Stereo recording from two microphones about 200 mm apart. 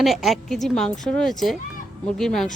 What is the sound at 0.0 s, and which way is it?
Speech, centre (ahead or behind).